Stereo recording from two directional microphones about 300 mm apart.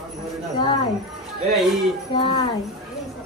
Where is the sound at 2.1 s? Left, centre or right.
Centre.